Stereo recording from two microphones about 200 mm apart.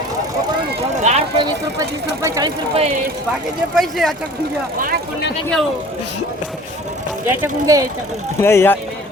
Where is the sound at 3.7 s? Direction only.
Centre (ahead or behind).